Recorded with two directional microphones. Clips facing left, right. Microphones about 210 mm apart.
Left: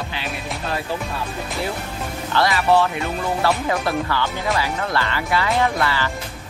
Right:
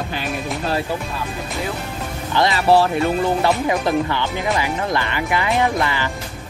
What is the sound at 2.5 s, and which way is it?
Speech, 35° right (ahead or behind).